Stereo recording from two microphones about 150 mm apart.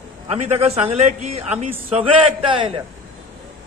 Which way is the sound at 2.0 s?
35° right (ahead or behind).